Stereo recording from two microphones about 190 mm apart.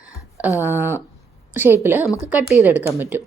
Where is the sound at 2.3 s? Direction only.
5° right (ahead or behind).